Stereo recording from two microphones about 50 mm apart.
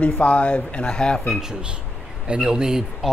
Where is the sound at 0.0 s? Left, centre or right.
Left.